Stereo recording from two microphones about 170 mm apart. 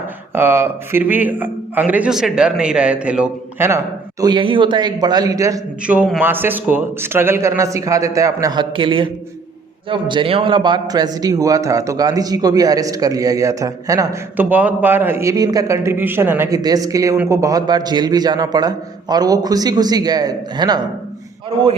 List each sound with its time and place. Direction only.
0.3 s a man's voice: 15° right (ahead or behind)
4.2 s a man's voice: 25° right (ahead or behind)
5.8 s a man's voice: 5° right (ahead or behind); by 20.8 s 25° right (ahead or behind)